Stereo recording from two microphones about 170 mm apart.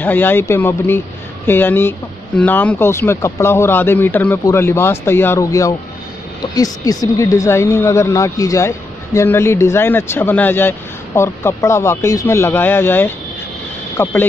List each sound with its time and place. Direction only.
0.0 s speech: 10° left (ahead or behind)